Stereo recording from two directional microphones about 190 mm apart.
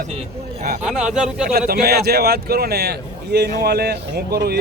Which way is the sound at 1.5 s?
55° right (ahead or behind).